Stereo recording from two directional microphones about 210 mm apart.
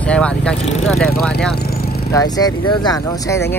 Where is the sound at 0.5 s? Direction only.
30° left (ahead or behind).